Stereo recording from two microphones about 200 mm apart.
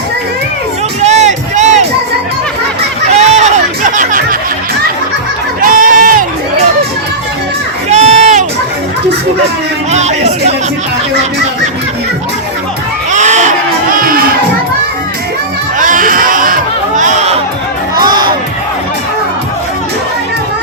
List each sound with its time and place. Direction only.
1.0 s crowd: 35° right (ahead or behind)
3.1 s chatter: 35° right (ahead or behind)
5.6 s crowd: 40° right (ahead or behind)
7.9 s crowd: 35° right (ahead or behind)
9.9 s music: 35° right (ahead or behind)
13.1 s a sound: 35° right (ahead or behind)
15.8 s music: 40° right (ahead or behind)
17.9 s music: 20° right (ahead or behind)